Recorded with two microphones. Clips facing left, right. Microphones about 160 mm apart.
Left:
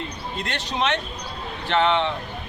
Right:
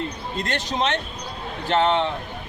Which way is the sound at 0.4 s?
40° right (ahead or behind).